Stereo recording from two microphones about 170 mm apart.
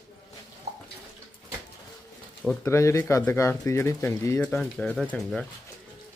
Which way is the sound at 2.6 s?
15° left (ahead or behind).